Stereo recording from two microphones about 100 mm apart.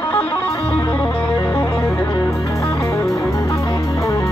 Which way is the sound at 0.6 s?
15° left (ahead or behind).